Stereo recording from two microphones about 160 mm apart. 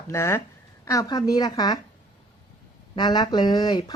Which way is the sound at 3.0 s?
25° left (ahead or behind).